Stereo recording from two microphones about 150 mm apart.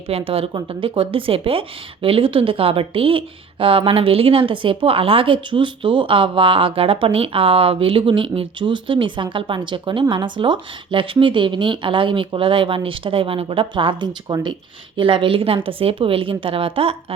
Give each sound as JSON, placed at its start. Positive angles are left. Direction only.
{"t": 0.1, "sound": "speech", "side_deg": -40}